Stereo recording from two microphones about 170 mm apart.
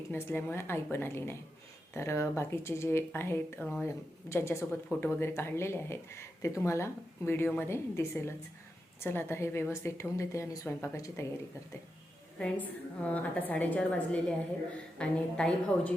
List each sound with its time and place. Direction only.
0.1 s speech: 10° left (ahead or behind)
12.4 s speech: 5° left (ahead or behind)